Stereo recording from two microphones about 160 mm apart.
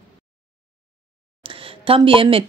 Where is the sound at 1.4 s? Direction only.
35° right (ahead or behind).